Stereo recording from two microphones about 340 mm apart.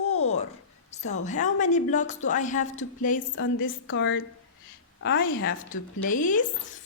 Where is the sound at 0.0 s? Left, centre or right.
Left.